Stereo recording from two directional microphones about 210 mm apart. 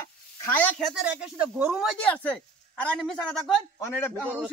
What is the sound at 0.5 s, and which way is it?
Speech, 5° left (ahead or behind).